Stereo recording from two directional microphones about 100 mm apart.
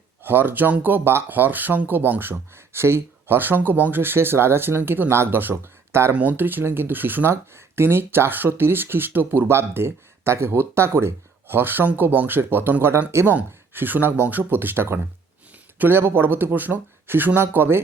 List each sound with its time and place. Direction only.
0.2 s speech: 20° right (ahead or behind)